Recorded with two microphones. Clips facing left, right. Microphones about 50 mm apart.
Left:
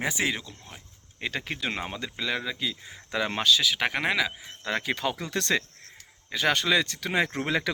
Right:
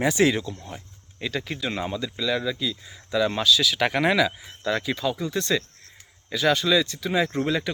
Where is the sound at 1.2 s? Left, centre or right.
Left.